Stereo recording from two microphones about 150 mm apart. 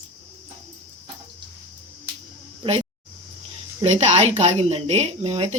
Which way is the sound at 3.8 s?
45° right (ahead or behind).